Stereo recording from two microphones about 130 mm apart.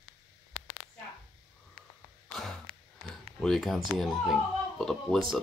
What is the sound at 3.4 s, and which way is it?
Speech, centre (ahead or behind).